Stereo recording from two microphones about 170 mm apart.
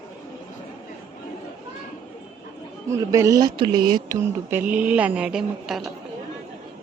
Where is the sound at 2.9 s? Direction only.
20° right (ahead or behind); by 5.9 s centre (ahead or behind).